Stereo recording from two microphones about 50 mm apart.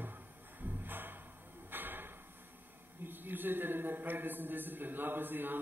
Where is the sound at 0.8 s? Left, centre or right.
Right.